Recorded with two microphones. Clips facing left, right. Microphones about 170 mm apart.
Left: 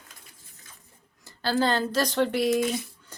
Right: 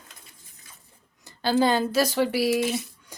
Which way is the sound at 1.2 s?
15° right (ahead or behind).